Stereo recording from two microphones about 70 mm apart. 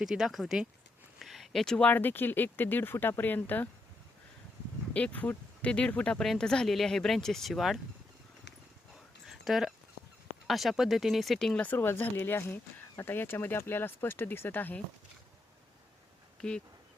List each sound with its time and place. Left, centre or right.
0.0 s speech: centre
1.2 s a sound: centre
1.8 s speech: left
4.9 s speech: left; by 7.8 s centre
9.2 s a sound: centre
10.4 s speech: centre
11.6 s speech: left
16.4 s speech: centre